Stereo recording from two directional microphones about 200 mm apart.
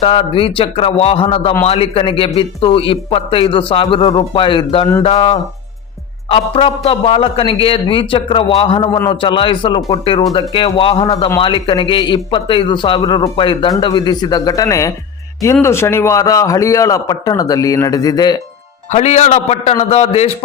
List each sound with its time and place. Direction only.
0.0 s a man's voice: 25° left (ahead or behind)
18.9 s a man's voice: 35° left (ahead or behind)